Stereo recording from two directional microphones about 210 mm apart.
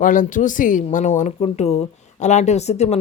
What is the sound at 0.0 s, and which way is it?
Speech, 40° left (ahead or behind).